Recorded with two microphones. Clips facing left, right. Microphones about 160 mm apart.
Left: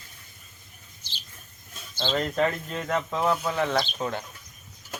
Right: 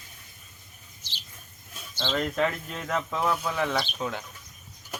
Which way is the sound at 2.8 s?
20° left (ahead or behind).